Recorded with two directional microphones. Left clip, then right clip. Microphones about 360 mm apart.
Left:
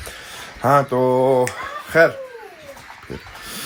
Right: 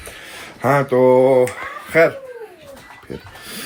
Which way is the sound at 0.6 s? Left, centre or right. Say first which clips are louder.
Right 2 dB; centre.